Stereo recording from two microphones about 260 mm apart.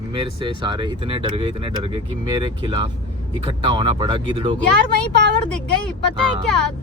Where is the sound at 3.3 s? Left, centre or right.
Centre.